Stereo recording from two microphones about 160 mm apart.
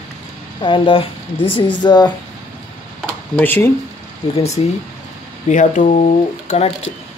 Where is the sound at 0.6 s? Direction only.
30° left (ahead or behind).